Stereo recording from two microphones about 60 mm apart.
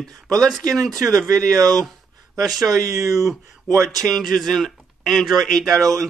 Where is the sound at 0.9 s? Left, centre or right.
Right.